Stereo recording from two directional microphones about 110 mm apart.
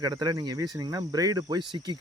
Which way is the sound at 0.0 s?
40° right (ahead or behind).